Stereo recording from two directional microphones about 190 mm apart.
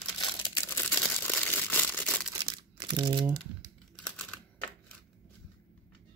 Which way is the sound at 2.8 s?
25° right (ahead or behind).